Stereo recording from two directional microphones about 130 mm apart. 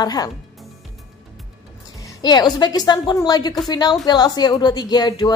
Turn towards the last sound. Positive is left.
turn(degrees=30)  # may be behind; listen again after turning